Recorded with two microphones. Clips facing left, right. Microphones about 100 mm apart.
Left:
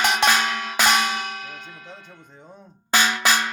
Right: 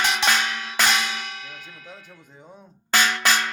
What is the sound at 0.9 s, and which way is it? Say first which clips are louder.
Clang: left 4 dB; 50° left (ahead or behind).